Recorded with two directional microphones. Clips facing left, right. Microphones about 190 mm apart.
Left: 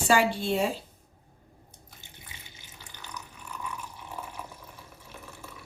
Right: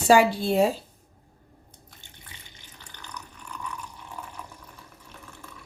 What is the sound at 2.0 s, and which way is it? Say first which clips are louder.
Water: left 1 dB; 5° left (ahead or behind).